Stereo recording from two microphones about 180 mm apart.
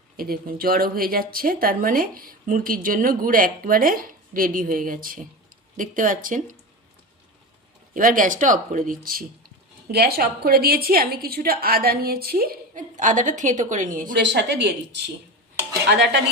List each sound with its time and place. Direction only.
0.2 s speech: 55° right (ahead or behind)
7.9 s a woman's voice: 50° right (ahead or behind)
14.2 s a woman's voice: 70° right (ahead or behind)